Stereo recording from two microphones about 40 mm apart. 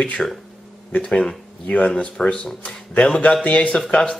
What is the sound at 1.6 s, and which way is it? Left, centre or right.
Speech, left.